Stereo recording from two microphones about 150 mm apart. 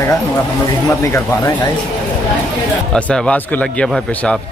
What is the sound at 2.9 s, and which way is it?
Speech, 10° left (ahead or behind).